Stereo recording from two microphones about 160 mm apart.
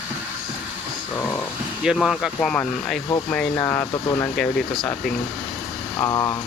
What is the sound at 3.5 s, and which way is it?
Speech, 15° left (ahead or behind).